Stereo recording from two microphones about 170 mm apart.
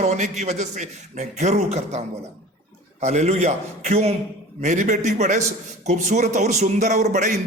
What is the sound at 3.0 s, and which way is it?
A man's voice, 40° right (ahead or behind).